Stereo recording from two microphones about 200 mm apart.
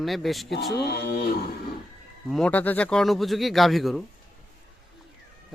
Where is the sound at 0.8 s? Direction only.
55° left (ahead or behind).